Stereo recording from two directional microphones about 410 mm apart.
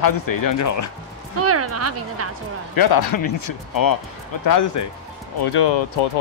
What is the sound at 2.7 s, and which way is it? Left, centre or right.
Speech, left.